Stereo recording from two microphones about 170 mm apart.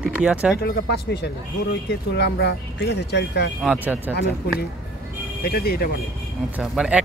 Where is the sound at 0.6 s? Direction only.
70° left (ahead or behind).